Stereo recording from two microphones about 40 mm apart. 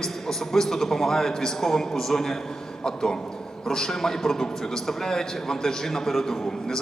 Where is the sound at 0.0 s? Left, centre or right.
Centre.